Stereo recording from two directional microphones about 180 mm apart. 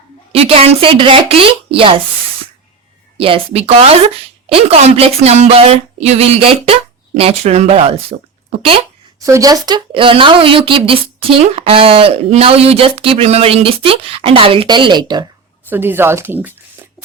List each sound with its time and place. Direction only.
0.3 s speech: 30° right (ahead or behind)
3.2 s speech: 30° right (ahead or behind)
9.2 s speech: 20° right (ahead or behind)
15.7 s speech: 10° right (ahead or behind)